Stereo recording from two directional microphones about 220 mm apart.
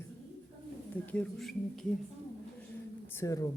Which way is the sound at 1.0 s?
5° left (ahead or behind).